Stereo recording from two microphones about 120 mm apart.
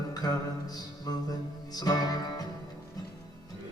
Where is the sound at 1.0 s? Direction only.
35° left (ahead or behind).